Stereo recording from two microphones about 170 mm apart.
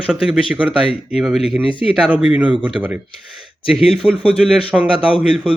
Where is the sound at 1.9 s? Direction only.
5° right (ahead or behind).